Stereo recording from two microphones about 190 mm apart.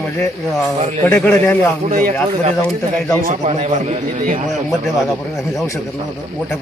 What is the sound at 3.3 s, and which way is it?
A man's voice, 35° right (ahead or behind).